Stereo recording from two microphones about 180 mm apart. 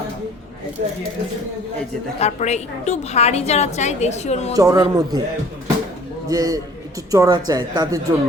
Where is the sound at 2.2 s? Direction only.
40° left (ahead or behind).